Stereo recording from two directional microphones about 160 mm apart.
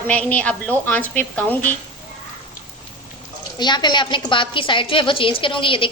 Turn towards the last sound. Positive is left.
turn(degrees=30)  # may be behind; listen again after turning